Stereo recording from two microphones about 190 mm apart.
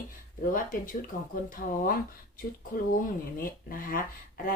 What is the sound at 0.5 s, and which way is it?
A woman's voice, 45° left (ahead or behind).